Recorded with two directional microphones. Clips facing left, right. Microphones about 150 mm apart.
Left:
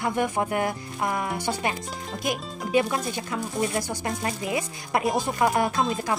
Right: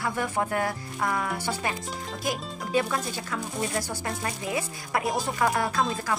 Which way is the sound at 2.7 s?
20° left (ahead or behind).